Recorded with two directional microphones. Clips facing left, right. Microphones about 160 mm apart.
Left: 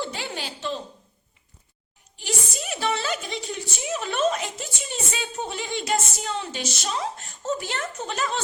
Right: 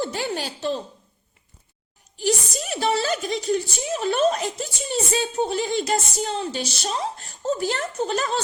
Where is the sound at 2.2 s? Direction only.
40° right (ahead or behind).